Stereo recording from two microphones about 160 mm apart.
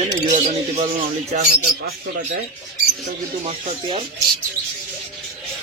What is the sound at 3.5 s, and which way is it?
Speech, 30° right (ahead or behind).